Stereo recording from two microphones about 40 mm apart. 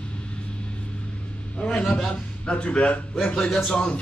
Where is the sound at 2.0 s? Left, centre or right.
Left.